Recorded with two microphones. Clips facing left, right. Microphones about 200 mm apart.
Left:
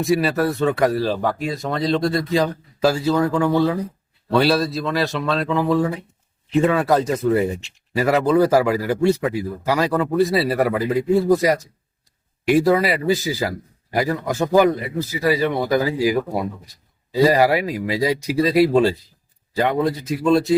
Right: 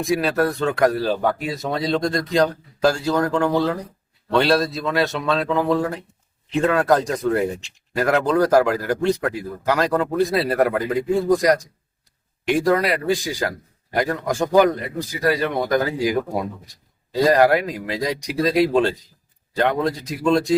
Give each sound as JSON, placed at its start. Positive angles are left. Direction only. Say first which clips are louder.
{"t": 0.0, "sound": "speech", "louder": "left 1 dB", "side_deg": 0}